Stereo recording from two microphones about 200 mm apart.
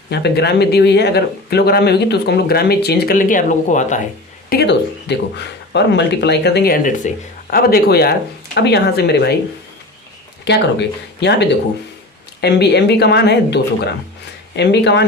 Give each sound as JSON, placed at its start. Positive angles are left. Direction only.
{"t": 0.1, "sound": "speech", "side_deg": 55}
{"t": 4.4, "sound": "speech", "side_deg": 55}
{"t": 10.4, "sound": "speech", "side_deg": 55}